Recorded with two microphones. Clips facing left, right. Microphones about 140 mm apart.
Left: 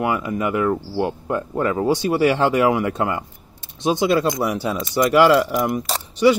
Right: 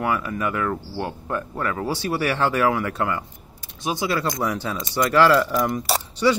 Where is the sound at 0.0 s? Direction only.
20° left (ahead or behind).